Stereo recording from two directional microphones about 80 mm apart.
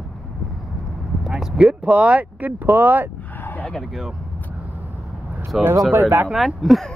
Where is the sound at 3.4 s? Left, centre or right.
Left.